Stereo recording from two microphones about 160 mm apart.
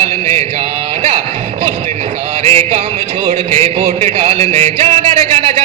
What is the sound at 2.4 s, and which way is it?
Music, 40° right (ahead or behind).